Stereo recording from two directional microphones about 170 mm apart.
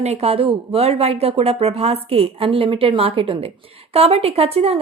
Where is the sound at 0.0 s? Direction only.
40° right (ahead or behind).